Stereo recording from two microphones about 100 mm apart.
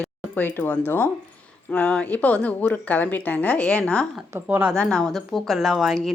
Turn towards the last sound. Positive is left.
turn(degrees=0)  # may be behind; listen again after turning